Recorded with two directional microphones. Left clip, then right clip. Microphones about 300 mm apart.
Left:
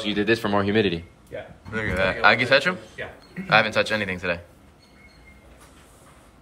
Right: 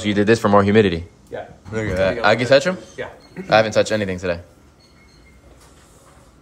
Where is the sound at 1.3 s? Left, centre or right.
Centre.